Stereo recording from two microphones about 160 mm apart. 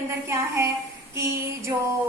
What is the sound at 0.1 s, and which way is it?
A woman's voice, 15° right (ahead or behind).